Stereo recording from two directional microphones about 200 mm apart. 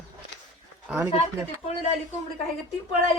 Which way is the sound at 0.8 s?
10° right (ahead or behind).